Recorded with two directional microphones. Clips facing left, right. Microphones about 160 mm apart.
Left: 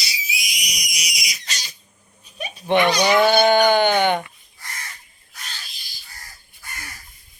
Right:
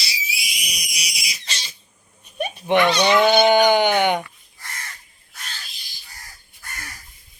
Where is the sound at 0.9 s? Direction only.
30° right (ahead or behind).